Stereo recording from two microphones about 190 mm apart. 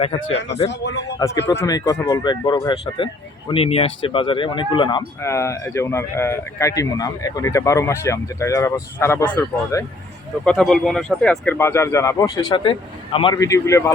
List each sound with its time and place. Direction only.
0.7 s speech: 65° left (ahead or behind)
1.5 s a man's voice: 20° left (ahead or behind)